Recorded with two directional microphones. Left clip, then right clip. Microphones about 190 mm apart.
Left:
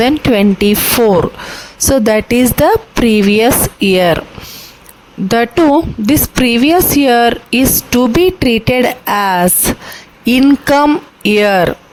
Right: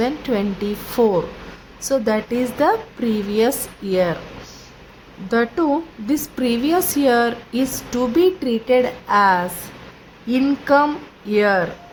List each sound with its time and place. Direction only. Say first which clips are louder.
0.0 s a woman's voice: left 10 dB; 55° left (ahead or behind)
5.3 s a woman's voice: left 9 dB; 50° left (ahead or behind)